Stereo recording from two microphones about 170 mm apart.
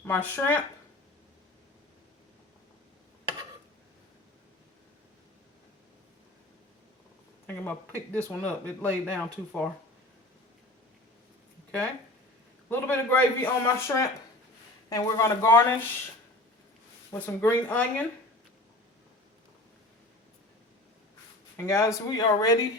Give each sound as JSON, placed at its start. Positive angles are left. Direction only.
{"t": 0.0, "sound": "a man's voice", "side_deg": 10}
{"t": 7.4, "sound": "a man's voice", "side_deg": 10}
{"t": 12.6, "sound": "a man's voice", "side_deg": 15}
{"t": 17.1, "sound": "a man's voice", "side_deg": 15}
{"t": 21.5, "sound": "speech", "side_deg": 15}